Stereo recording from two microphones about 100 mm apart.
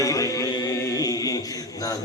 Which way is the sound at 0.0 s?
35° left (ahead or behind).